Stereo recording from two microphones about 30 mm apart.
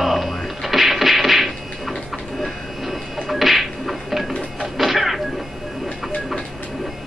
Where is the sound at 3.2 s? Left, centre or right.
Centre.